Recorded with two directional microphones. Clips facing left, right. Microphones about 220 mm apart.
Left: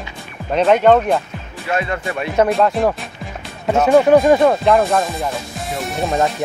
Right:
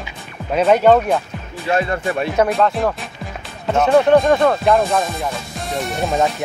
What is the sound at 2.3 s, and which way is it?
Speech, centre (ahead or behind).